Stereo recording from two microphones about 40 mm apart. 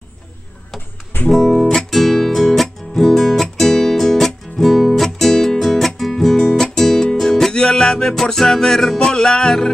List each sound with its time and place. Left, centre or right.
1.3 s guitar: centre
1.7 s music: centre
7.5 s music: left